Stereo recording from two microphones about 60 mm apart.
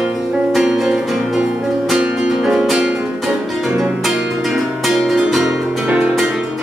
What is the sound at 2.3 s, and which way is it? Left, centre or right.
Music, centre.